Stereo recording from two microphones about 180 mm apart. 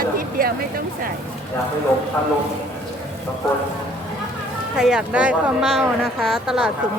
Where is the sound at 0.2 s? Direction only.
55° right (ahead or behind).